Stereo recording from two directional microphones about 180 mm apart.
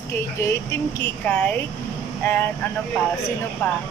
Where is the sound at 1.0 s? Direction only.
10° left (ahead or behind).